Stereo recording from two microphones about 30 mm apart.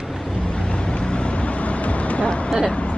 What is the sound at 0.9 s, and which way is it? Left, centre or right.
Vehicle, left.